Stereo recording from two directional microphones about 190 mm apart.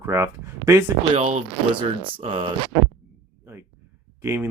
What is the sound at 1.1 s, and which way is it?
Speech, 30° right (ahead or behind).